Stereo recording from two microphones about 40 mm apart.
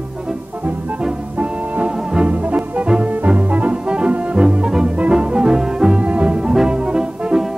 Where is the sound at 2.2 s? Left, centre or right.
Right.